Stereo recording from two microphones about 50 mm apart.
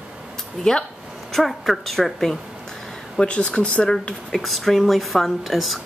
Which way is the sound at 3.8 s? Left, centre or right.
Centre.